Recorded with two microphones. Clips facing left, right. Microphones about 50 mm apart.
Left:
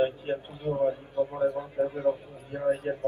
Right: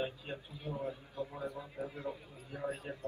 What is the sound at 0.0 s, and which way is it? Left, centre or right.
A man's voice, left.